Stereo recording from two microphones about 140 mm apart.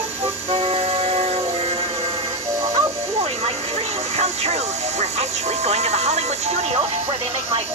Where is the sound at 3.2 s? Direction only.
50° right (ahead or behind).